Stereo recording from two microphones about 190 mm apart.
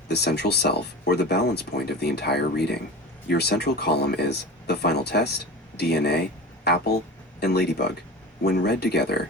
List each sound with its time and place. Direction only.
0.1 s speech: 60° left (ahead or behind)
7.3 s speech: 60° left (ahead or behind)